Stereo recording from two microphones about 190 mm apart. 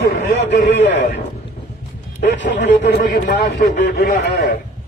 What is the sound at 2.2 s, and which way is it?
Speech, 65° left (ahead or behind).